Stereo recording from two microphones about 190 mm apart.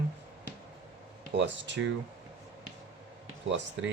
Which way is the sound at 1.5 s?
70° right (ahead or behind).